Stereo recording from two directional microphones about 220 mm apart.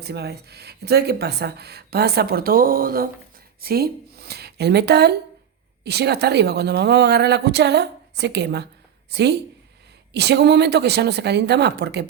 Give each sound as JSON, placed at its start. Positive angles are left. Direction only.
{"t": 0.0, "sound": "speech", "side_deg": -50}